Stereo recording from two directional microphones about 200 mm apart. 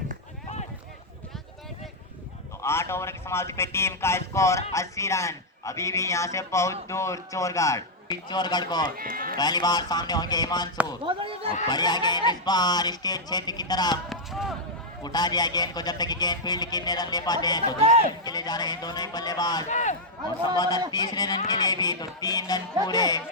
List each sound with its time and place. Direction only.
2.6 s a man's voice: 15° left (ahead or behind)
9.0 s speech: 45° right (ahead or behind)
9.4 s a man's voice: 20° left (ahead or behind)
11.0 s speech: 25° right (ahead or behind)
11.7 s a man's voice: 20° left (ahead or behind)
14.1 s speech: centre (ahead or behind)
15.0 s a man's voice: 20° left (ahead or behind)
19.7 s speech: 35° left (ahead or behind)
20.9 s a man's voice: 20° left (ahead or behind)